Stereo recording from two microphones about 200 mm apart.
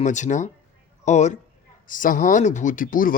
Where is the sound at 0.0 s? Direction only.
35° left (ahead or behind).